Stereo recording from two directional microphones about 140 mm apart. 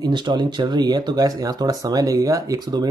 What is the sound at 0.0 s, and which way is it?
Speech, 35° right (ahead or behind).